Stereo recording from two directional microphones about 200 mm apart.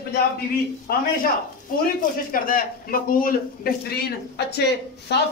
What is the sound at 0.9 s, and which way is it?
A man's voice, 50° left (ahead or behind).